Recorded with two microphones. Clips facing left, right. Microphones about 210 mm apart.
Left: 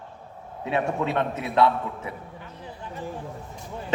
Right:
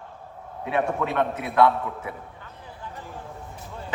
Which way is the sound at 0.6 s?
25° left (ahead or behind).